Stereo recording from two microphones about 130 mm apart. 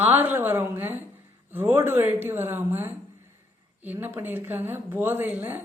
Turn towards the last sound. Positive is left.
turn(degrees=-15)  # may be behind; listen again after turning